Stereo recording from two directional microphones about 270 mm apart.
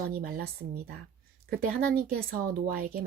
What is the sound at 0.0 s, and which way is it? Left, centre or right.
Speech, right.